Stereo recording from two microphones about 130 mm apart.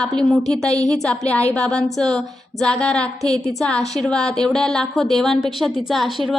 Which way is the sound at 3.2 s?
55° left (ahead or behind).